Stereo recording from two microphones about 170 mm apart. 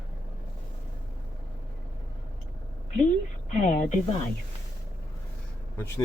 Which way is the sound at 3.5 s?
45° left (ahead or behind).